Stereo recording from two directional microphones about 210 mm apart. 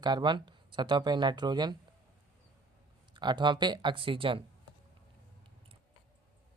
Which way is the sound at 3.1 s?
20° right (ahead or behind).